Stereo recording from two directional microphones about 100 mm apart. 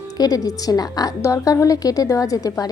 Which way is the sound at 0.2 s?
40° left (ahead or behind).